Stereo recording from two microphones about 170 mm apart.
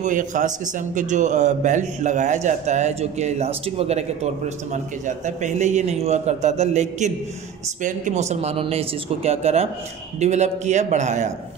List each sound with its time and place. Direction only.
0.0 s a man's voice: 50° right (ahead or behind)